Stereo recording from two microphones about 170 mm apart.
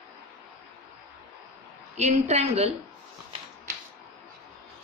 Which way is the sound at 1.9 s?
40° right (ahead or behind).